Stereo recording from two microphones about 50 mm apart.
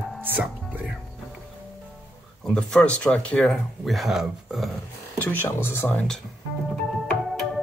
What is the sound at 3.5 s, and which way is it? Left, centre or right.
Speech, centre.